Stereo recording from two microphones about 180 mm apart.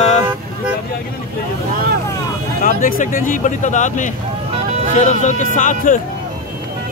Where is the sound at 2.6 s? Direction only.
45° left (ahead or behind).